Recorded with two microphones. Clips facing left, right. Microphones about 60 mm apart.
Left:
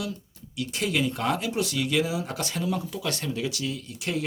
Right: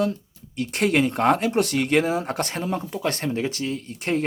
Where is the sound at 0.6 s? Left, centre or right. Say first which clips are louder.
Right 6 dB; right.